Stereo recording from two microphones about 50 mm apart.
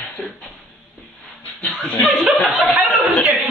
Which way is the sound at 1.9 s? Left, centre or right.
Left.